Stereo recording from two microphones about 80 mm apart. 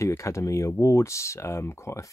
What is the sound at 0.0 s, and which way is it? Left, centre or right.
Speech, left.